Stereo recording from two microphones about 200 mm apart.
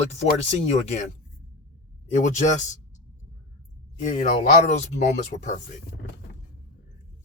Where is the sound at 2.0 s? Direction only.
35° left (ahead or behind).